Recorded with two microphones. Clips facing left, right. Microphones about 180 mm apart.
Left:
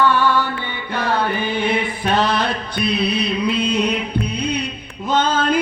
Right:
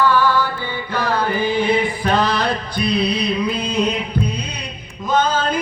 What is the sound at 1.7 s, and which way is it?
Chant, 25° left (ahead or behind).